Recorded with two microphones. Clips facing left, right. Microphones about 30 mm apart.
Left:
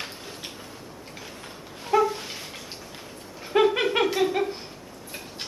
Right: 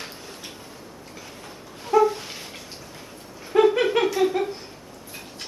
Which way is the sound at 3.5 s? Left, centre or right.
Left.